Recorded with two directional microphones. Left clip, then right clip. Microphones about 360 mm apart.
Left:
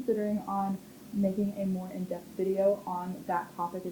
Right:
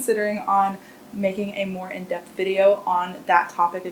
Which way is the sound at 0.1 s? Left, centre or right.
Centre.